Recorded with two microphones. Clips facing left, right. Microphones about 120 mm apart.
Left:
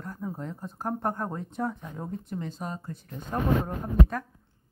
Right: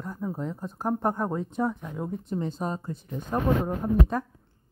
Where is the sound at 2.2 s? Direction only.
25° right (ahead or behind).